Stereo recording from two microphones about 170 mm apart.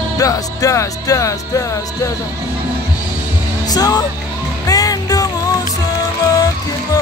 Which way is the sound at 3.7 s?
20° left (ahead or behind).